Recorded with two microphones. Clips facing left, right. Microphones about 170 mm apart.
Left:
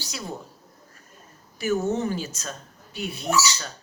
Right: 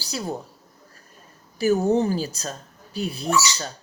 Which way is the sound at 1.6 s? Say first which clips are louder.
Right 5 dB; 35° right (ahead or behind).